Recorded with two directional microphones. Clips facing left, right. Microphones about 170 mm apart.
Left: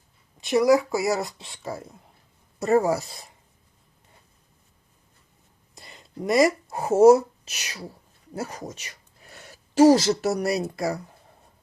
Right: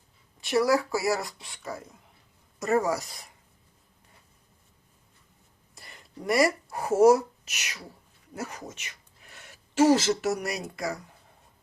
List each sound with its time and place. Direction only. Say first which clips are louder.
0.3 s speech: left 5 dB; 20° left (ahead or behind)
5.7 s speech: left 6 dB; 20° left (ahead or behind)